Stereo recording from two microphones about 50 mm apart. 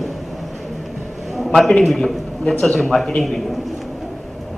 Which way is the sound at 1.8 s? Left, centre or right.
Centre.